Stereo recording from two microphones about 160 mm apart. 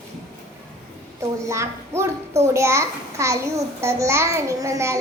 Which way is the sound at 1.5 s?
15° right (ahead or behind).